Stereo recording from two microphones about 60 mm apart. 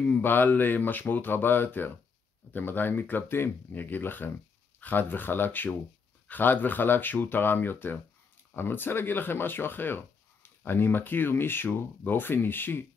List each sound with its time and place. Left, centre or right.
0.1 s speech: left